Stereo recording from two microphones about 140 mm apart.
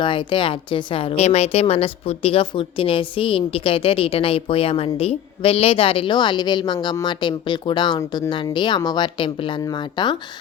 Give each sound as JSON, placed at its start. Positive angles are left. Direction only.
{"t": 0.0, "sound": "speech", "side_deg": 35}